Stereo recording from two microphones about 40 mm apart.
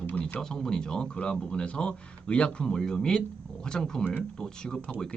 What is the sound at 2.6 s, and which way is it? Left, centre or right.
Speech, centre.